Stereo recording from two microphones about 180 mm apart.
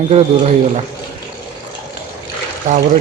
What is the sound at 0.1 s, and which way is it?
Speech, 40° right (ahead or behind).